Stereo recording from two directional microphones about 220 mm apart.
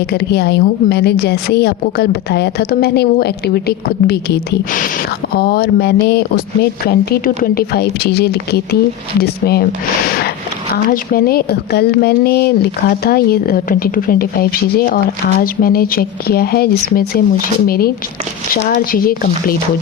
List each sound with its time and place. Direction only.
0.1 s a woman's voice: 50° left (ahead or behind)
5.4 s a woman's voice: 45° left (ahead or behind)
10.1 s a sound: 45° left (ahead or behind)
10.8 s a woman's voice: 40° left (ahead or behind)